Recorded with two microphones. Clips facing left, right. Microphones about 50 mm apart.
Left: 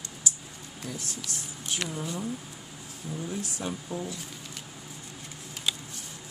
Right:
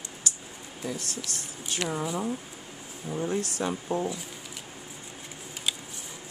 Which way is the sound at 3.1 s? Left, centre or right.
Right.